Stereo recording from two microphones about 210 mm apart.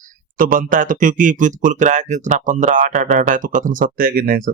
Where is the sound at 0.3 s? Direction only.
40° right (ahead or behind).